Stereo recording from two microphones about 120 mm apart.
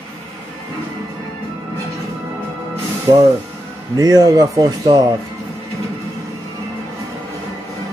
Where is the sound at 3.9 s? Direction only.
30° right (ahead or behind).